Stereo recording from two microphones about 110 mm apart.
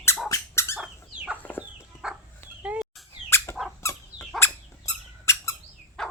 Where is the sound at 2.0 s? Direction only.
5° right (ahead or behind).